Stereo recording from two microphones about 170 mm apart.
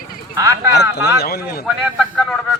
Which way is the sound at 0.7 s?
75° left (ahead or behind).